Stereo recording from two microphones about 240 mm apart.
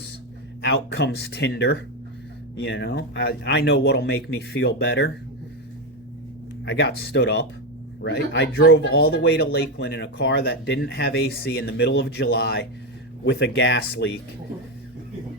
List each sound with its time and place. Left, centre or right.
0.6 s speech: left
6.7 s speech: left